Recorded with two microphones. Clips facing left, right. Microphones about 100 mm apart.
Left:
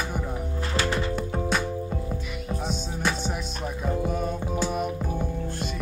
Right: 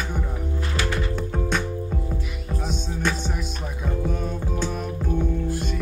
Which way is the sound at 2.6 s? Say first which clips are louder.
Right 2 dB; centre (ahead or behind).